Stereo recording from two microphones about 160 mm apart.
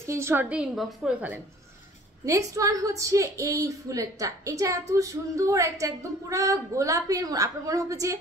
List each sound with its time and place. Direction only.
0.0 s a woman's voice: 15° right (ahead or behind)
2.2 s a woman's voice: 20° right (ahead or behind)